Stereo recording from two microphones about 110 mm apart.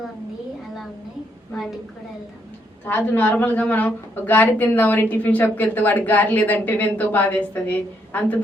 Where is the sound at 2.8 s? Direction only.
15° left (ahead or behind).